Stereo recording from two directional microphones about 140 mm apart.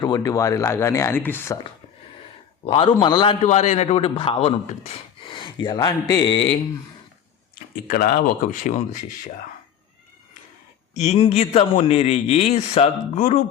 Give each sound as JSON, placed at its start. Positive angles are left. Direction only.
{"t": 0.0, "sound": "speech", "side_deg": 25}
{"t": 2.6, "sound": "speech", "side_deg": 40}
{"t": 3.4, "sound": "speech", "side_deg": 50}
{"t": 7.9, "sound": "speech", "side_deg": 85}
{"t": 10.9, "sound": "a man's voice", "side_deg": 55}
{"t": 13.1, "sound": "speech", "side_deg": 60}